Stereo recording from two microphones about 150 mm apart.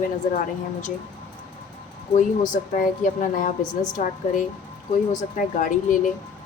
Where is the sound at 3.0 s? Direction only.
60° left (ahead or behind).